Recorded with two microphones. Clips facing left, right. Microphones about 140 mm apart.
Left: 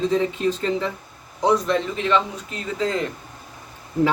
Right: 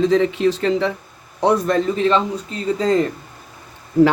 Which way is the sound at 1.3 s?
60° right (ahead or behind).